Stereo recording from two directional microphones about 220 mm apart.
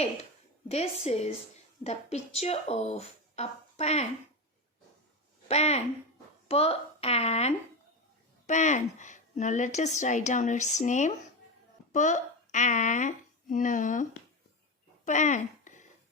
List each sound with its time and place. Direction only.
0.7 s speech: 30° left (ahead or behind)
5.5 s a woman's voice: 30° left (ahead or behind)
15.0 s a sound: 35° left (ahead or behind)